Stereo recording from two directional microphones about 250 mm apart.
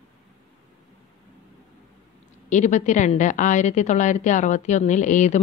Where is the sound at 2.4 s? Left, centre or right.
Left.